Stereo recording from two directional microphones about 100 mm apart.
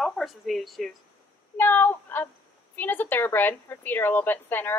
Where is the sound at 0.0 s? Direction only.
Centre (ahead or behind).